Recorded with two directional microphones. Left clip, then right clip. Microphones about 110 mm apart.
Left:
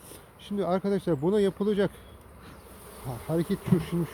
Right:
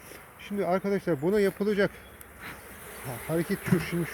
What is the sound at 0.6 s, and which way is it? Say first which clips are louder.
Speech: even; 15° left (ahead or behind).